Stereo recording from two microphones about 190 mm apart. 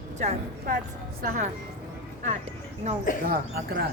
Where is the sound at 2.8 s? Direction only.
35° right (ahead or behind).